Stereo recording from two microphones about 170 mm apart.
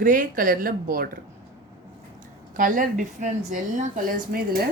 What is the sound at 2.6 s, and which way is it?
A woman's voice, 50° right (ahead or behind).